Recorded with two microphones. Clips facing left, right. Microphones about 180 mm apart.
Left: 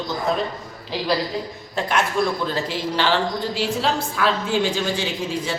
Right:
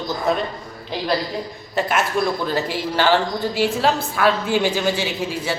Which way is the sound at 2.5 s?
55° right (ahead or behind).